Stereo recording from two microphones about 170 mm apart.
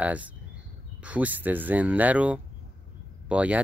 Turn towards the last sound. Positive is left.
turn(degrees=-10)  # may be behind; listen again after turning